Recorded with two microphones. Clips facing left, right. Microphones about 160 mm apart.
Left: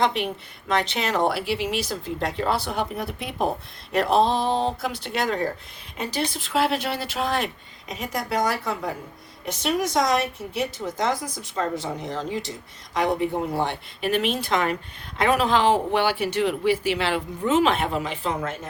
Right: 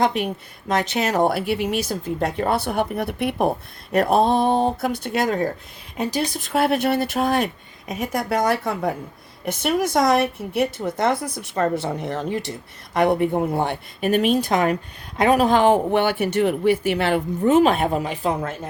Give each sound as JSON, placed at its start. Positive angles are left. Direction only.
{"t": 0.0, "sound": "a woman's voice", "side_deg": -45}